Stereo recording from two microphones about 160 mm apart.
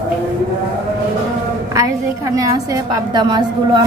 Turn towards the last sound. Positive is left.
turn(degrees=-25)  # may be behind; listen again after turning